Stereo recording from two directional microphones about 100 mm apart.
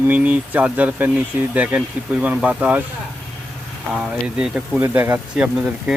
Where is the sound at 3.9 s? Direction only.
5° right (ahead or behind).